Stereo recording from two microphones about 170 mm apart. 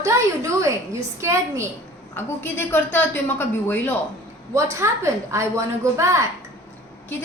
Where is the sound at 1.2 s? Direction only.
15° right (ahead or behind).